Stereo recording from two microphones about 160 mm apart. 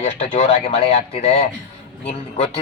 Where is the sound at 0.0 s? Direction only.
40° left (ahead or behind).